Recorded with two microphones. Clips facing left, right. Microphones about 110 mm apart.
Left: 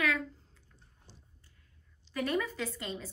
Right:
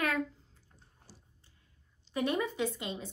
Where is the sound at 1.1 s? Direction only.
5° right (ahead or behind).